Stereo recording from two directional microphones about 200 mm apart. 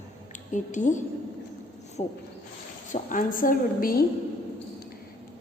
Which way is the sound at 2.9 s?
40° left (ahead or behind).